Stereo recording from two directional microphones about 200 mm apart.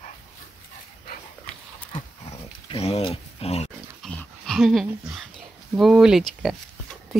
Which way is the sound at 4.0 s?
5° left (ahead or behind).